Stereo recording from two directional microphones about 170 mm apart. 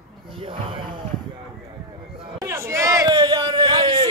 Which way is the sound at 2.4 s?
15° right (ahead or behind).